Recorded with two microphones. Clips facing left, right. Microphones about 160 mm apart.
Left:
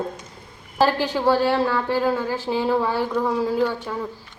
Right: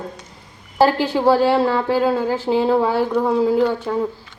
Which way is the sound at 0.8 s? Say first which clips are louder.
Right 4 dB; 15° right (ahead or behind).